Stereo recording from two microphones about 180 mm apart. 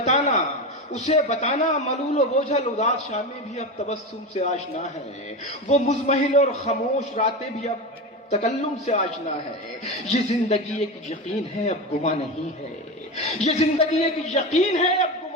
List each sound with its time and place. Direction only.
0.0 s a sound: 40° left (ahead or behind)
0.9 s a man's voice: 40° left (ahead or behind)
10.1 s a man's voice: 40° left (ahead or behind)
13.1 s a man's voice: 40° left (ahead or behind)